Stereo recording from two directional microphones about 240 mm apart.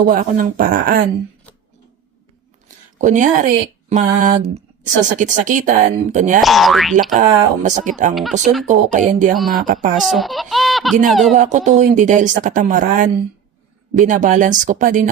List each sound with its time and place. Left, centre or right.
0.0 s speech: right
2.6 s speech: right
6.4 s speech: centre
7.1 s speech: right
8.1 s speech: centre
8.6 s speech: right
9.3 s speech: centre
11.3 s speech: right